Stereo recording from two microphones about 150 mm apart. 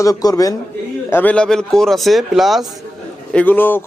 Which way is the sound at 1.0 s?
10° left (ahead or behind).